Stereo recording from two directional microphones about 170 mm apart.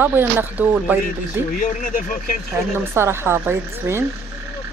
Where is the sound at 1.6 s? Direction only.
50° left (ahead or behind).